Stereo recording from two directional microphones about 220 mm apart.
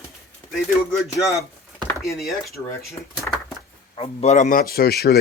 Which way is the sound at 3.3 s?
10° left (ahead or behind).